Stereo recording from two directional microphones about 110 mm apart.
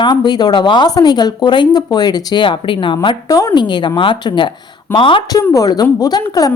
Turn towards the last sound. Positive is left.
turn(degrees=35)  # may be behind; listen again after turning